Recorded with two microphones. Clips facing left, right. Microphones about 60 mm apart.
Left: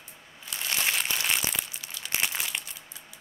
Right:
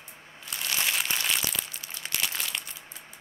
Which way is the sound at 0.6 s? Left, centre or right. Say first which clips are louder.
Left 1 dB; left.